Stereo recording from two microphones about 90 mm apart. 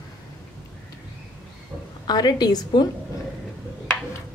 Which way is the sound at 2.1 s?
50° left (ahead or behind).